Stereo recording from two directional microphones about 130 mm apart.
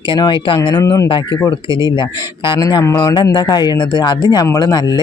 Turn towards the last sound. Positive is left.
turn(degrees=30)  # may be behind; listen again after turning